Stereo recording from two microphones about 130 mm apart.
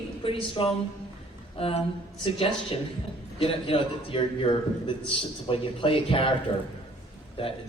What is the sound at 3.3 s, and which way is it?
A man's voice, 45° left (ahead or behind).